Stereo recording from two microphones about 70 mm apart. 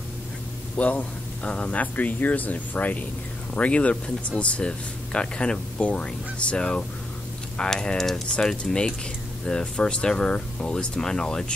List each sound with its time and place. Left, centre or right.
0.7 s speech: left